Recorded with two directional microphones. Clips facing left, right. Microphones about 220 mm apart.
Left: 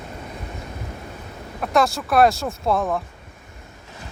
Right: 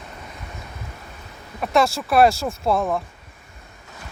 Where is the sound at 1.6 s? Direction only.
Centre (ahead or behind).